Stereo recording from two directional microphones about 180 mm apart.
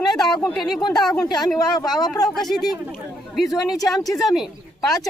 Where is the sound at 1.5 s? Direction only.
20° left (ahead or behind).